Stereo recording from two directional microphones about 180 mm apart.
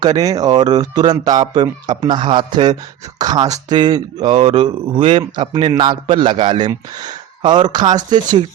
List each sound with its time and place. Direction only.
0.0 s speech: 20° right (ahead or behind)